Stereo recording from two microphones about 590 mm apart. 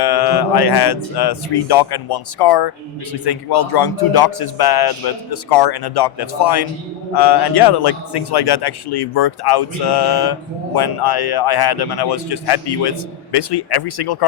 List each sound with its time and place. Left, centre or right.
0.0 s speech: left